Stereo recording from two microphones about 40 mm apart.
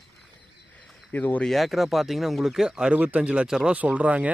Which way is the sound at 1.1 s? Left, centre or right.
Left.